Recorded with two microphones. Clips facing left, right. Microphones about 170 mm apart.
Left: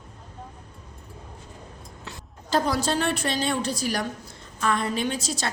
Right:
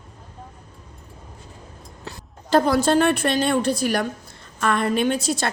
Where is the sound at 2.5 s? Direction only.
55° right (ahead or behind).